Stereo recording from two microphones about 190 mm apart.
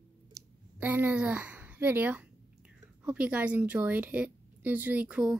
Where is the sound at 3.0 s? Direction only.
5° right (ahead or behind).